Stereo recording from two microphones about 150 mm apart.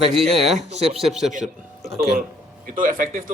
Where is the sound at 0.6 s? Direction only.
45° right (ahead or behind).